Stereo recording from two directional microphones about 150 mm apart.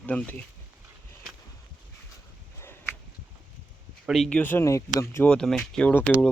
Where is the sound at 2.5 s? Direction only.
15° left (ahead or behind).